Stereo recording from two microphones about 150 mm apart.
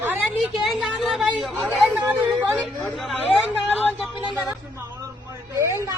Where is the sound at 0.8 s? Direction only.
5° right (ahead or behind).